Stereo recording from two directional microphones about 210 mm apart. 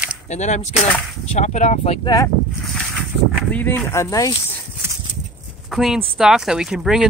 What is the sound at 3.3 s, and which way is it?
Speech, 5° left (ahead or behind).